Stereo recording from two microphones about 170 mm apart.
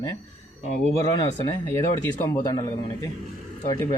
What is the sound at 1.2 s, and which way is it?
A man's voice, 20° left (ahead or behind).